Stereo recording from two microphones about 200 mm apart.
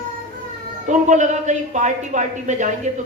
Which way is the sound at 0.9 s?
40° right (ahead or behind).